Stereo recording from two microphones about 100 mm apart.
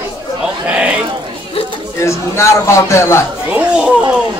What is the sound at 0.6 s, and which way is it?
Speech, 15° right (ahead or behind).